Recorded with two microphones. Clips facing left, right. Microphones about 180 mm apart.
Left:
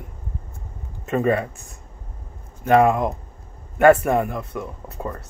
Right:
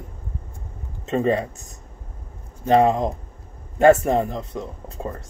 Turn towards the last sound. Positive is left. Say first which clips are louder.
# left 1 dB
turn(degrees=-25)  # may be behind; listen again after turning